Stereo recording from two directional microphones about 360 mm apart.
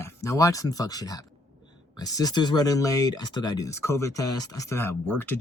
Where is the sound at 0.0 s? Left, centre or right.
Centre.